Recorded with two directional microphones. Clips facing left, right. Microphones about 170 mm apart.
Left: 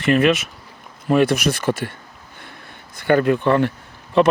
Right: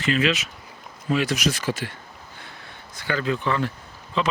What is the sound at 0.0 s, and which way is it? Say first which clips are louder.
Speech: left 6 dB; 55° left (ahead or behind).